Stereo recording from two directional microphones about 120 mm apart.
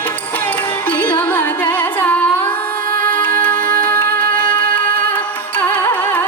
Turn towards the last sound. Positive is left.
turn(degrees=15)  # may be behind; listen again after turning